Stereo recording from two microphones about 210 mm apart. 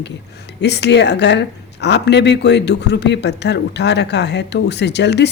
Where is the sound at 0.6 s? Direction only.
55° left (ahead or behind).